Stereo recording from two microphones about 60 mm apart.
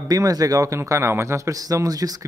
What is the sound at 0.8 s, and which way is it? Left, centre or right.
Speech, right.